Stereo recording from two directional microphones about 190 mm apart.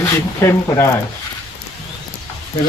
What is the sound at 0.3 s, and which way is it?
Speech, 15° left (ahead or behind).